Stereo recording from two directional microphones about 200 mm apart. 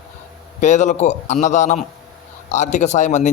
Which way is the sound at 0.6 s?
35° left (ahead or behind).